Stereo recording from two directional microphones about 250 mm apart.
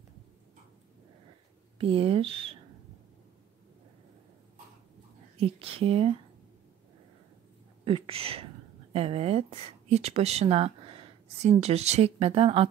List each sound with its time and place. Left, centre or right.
1.8 s speech: right
5.4 s speech: right
7.8 s speech: right